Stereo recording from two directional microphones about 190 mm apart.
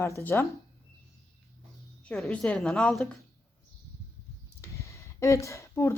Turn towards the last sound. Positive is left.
turn(degrees=15)  # may be behind; listen again after turning